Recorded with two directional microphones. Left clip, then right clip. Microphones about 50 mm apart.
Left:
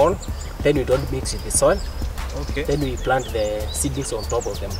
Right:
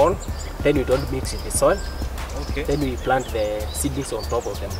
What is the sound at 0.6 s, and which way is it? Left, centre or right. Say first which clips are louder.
Speech: left 1 dB; left.